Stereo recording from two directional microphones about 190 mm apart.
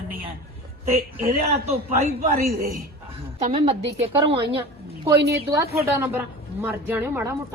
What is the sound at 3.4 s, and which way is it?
Speech, 30° right (ahead or behind).